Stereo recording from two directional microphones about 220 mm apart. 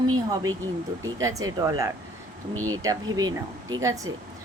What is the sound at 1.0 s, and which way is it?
Speech, 15° right (ahead or behind).